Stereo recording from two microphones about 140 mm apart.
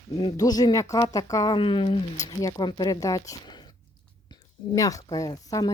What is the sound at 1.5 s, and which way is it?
Speech, 35° left (ahead or behind).